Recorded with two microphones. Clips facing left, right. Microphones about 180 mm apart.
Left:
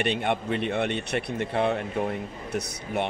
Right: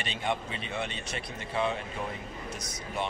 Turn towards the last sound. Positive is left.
turn(degrees=65)  # may be behind; listen again after turning